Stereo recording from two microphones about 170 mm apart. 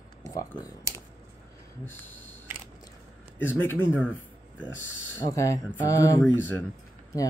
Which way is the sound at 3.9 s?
10° left (ahead or behind).